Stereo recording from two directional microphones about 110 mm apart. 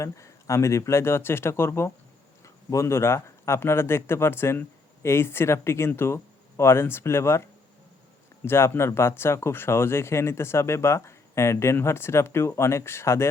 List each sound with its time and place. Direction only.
0.0 s speech: 30° left (ahead or behind)
8.4 s speech: 20° left (ahead or behind)